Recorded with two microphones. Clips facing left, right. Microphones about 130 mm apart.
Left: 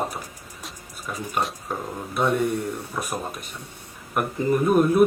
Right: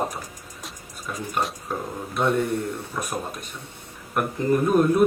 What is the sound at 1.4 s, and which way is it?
Speech, 10° left (ahead or behind).